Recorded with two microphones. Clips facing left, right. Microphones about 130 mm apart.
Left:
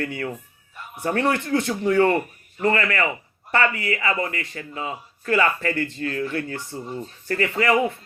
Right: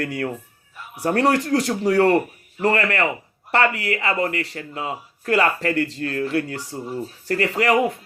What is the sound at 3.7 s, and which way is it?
Speech, 70° right (ahead or behind).